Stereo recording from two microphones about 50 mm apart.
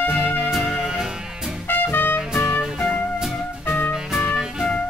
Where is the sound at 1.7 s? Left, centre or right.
Left.